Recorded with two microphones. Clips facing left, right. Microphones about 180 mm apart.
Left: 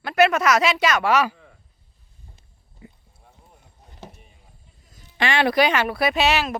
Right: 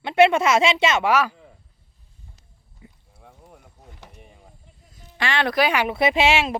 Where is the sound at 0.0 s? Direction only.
25° right (ahead or behind).